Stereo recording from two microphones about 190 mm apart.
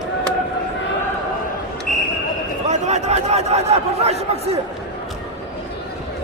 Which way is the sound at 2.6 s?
35° right (ahead or behind).